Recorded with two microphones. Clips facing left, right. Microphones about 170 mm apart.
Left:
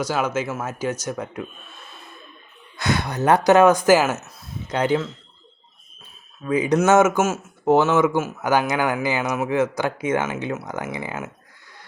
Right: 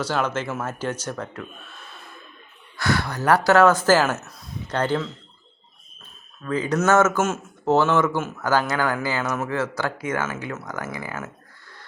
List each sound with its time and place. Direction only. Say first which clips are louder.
0.0 s speech: left 2 dB; 10° left (ahead or behind)
2.7 s speech: left 1 dB; 20° left (ahead or behind)
6.4 s speech: left 3 dB; 15° left (ahead or behind)